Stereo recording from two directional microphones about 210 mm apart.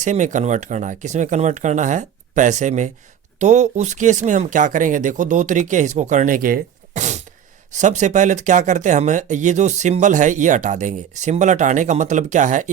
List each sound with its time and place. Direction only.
0.0 s speech: 35° right (ahead or behind)